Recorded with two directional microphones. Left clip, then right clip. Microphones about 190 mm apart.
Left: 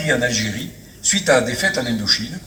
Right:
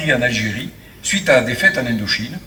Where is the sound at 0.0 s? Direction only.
15° right (ahead or behind).